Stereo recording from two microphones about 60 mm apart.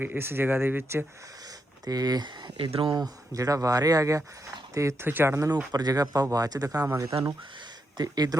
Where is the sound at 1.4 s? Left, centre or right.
Right.